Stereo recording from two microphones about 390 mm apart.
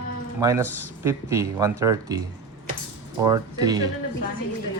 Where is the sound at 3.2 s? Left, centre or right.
Centre.